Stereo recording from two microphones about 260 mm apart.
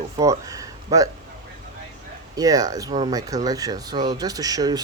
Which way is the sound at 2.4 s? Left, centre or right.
Centre.